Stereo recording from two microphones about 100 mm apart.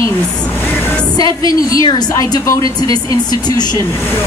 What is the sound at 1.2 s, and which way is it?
A woman's voice, 40° left (ahead or behind).